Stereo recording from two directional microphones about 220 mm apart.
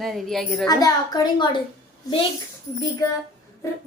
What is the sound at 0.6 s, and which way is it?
Speech, 15° left (ahead or behind).